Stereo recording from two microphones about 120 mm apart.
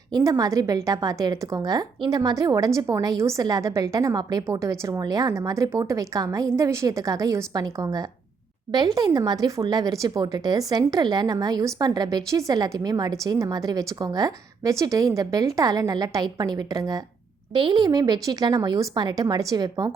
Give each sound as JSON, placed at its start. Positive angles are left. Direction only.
{"t": 0.1, "sound": "a woman's voice", "side_deg": -30}